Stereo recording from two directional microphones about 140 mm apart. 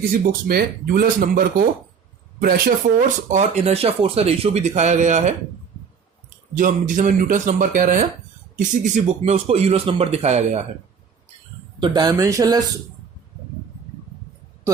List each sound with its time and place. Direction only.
0.3 s speech: 90° right
3.2 s speech: 55° right (ahead or behind)
6.6 s speech: 70° right (ahead or behind)
8.5 s speech: 55° right (ahead or behind)
11.8 s speech: 30° right (ahead or behind)